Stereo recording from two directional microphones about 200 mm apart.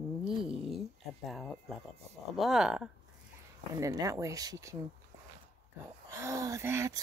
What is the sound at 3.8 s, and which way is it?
Speech, 15° right (ahead or behind).